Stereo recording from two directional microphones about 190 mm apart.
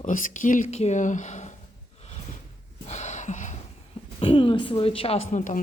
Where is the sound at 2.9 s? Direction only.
35° left (ahead or behind).